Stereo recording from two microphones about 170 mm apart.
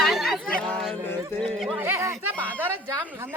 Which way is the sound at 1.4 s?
Centre (ahead or behind).